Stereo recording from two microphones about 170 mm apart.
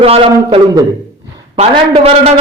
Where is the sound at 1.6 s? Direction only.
35° right (ahead or behind).